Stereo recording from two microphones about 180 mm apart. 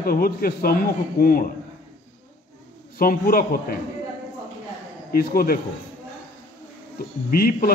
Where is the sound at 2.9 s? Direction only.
55° left (ahead or behind).